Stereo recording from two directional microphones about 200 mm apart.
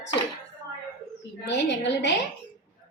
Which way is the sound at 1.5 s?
65° left (ahead or behind).